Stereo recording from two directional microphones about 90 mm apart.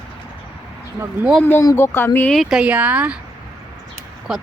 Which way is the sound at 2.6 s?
15° right (ahead or behind).